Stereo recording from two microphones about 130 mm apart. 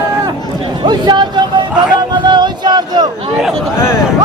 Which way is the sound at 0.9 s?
35° right (ahead or behind).